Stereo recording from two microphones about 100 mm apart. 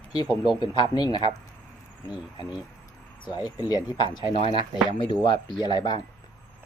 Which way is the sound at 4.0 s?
55° left (ahead or behind).